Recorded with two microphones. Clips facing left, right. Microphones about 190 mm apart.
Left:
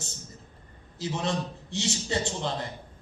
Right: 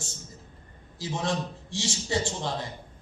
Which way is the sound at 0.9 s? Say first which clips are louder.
Even; 20° left (ahead or behind).